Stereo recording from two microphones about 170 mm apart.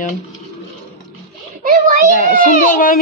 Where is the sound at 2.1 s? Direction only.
55° left (ahead or behind).